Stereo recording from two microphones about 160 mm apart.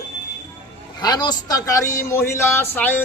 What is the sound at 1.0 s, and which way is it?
A man's voice, 25° left (ahead or behind).